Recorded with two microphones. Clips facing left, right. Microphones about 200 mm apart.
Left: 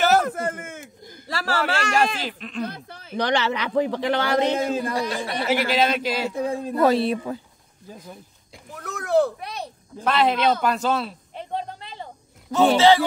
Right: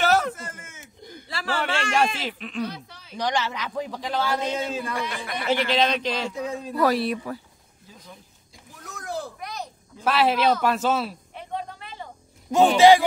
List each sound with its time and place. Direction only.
0.0 s a sound: centre (ahead or behind)
0.3 s a sound: 55° left (ahead or behind)
1.2 s chuckle: 40° left (ahead or behind)
2.0 s speech: centre (ahead or behind)
2.6 s speech: 50° left (ahead or behind); by 4.6 s 70° left (ahead or behind)
4.6 s a man's voice: 45° left (ahead or behind)
5.5 s a man's voice: 5° left (ahead or behind)
6.3 s speech: 55° left (ahead or behind)
6.8 s speech: 25° left (ahead or behind)
8.7 s a sound: 65° left (ahead or behind)
9.4 s a sound: 30° left (ahead or behind)
10.0 s speech: 5° right (ahead or behind)
12.4 s a man's voice: 15° right (ahead or behind)